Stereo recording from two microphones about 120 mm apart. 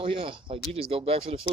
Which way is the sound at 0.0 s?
50° right (ahead or behind).